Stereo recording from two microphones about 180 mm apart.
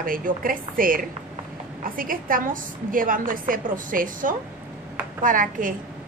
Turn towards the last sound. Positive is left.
turn(degrees=-50)  # may be behind; listen again after turning